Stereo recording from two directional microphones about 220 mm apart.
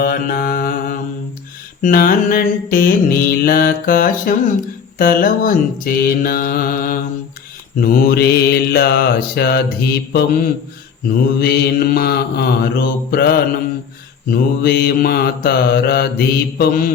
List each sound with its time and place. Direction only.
0.0 s mantra: 40° left (ahead or behind)